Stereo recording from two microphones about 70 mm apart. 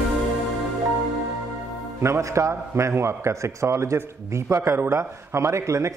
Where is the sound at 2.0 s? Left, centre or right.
Right.